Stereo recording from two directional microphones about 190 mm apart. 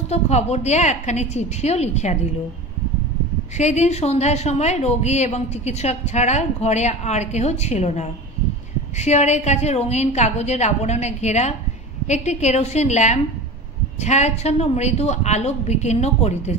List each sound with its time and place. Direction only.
0.1 s a woman's voice: 35° left (ahead or behind)
3.5 s a woman's voice: 35° left (ahead or behind)